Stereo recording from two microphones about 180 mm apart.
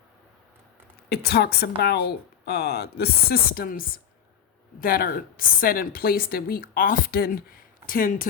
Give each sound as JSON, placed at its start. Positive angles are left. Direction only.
{"t": 1.1, "sound": "a woman's voice", "side_deg": 60}